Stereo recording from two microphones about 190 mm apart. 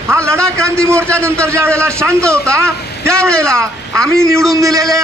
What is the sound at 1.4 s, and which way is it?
A man's voice, 15° right (ahead or behind).